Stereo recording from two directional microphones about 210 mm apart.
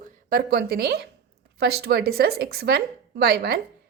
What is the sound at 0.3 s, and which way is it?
A woman's voice, 45° right (ahead or behind).